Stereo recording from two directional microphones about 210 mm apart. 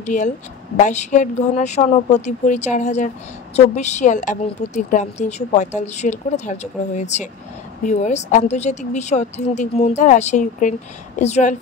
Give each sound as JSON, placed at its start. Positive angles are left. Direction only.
{"t": 0.0, "sound": "a woman's voice", "side_deg": 35}